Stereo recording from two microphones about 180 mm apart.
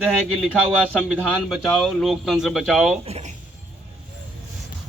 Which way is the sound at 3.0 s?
35° right (ahead or behind).